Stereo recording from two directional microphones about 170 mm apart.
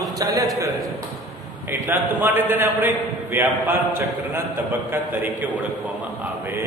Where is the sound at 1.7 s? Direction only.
10° right (ahead or behind).